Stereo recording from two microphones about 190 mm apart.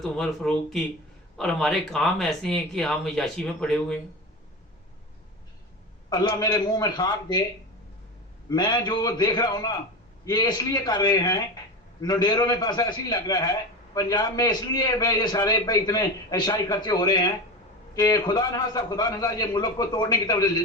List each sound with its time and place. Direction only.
0.0 s speech: 5° left (ahead or behind)
6.1 s a man's voice: 20° left (ahead or behind)
8.4 s a man's voice: 20° left (ahead or behind)